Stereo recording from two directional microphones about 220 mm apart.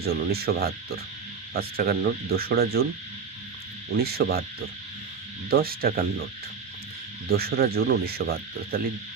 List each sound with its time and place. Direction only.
0.0 s speech: 45° right (ahead or behind)
3.9 s speech: 45° right (ahead or behind)
5.5 s speech: 45° right (ahead or behind)
7.3 s speech: 45° right (ahead or behind)